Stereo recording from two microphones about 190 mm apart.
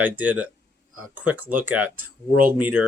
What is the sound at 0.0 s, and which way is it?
Speech, 10° right (ahead or behind).